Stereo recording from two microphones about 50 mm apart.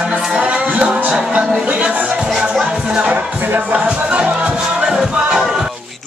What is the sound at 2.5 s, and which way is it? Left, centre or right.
Music, centre.